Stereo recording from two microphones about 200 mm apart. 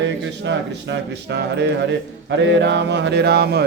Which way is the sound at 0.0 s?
65° right (ahead or behind).